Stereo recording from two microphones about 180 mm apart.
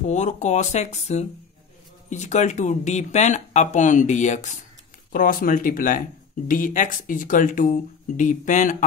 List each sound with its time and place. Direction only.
0.0 s speech: 40° left (ahead or behind)